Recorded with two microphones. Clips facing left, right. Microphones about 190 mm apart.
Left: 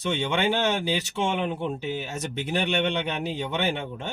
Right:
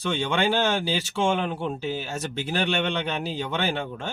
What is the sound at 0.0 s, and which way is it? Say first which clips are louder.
Speech: right 1 dB; 20° left (ahead or behind).